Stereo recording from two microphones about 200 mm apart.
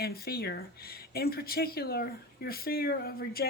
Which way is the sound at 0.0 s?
50° left (ahead or behind).